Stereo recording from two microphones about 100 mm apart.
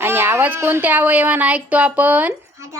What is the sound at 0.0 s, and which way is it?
A woman's voice, 20° right (ahead or behind).